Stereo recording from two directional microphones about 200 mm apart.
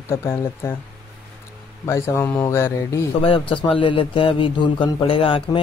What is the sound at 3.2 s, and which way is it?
Speech, 25° left (ahead or behind).